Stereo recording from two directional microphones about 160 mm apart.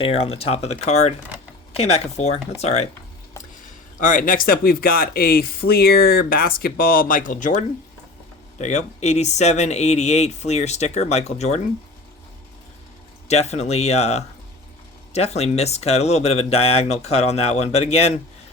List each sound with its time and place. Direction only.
0.0 s speech: 35° left (ahead or behind)
4.0 s speech: 60° left (ahead or behind)
13.2 s speech: 45° left (ahead or behind)